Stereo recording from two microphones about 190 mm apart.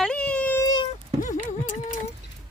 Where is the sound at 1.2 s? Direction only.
40° left (ahead or behind).